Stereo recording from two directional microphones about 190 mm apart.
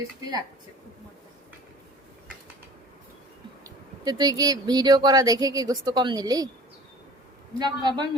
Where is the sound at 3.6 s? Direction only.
20° right (ahead or behind).